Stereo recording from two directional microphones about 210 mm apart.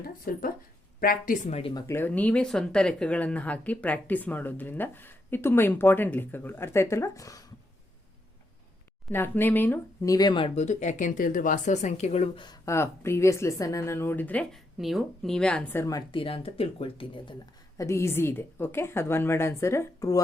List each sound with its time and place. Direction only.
0.3 s speech: 45° left (ahead or behind); by 1.8 s 25° left (ahead or behind)
1.9 s speech: 10° left (ahead or behind)
9.0 s speech: 10° left (ahead or behind); by 12.5 s 30° left (ahead or behind)
12.5 s speech: 15° left (ahead or behind)
17.7 s speech: 15° left (ahead or behind)